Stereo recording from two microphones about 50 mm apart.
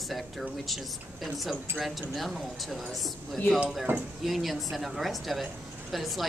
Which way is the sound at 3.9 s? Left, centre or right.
Right.